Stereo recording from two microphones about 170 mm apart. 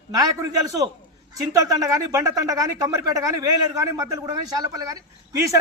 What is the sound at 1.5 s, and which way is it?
A man's voice, 20° right (ahead or behind).